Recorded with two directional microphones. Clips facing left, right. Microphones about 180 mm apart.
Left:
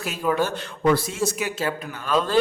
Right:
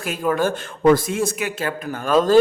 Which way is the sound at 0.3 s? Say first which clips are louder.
Right 3 dB; 50° right (ahead or behind).